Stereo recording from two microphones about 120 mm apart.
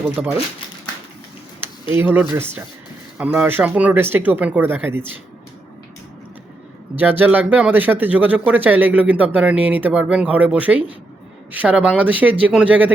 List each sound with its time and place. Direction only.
0.2 s speech: 5° right (ahead or behind)
1.9 s speech: 15° right (ahead or behind)
7.0 s speech: 15° right (ahead or behind)